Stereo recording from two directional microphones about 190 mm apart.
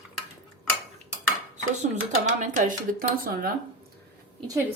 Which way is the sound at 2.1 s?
40° right (ahead or behind).